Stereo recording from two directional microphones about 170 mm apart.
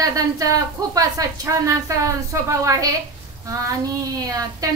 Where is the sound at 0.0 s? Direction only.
20° right (ahead or behind).